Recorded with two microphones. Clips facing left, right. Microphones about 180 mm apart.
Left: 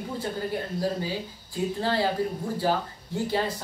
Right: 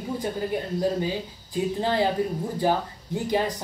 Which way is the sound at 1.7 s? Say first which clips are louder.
Right 2 dB; 20° right (ahead or behind).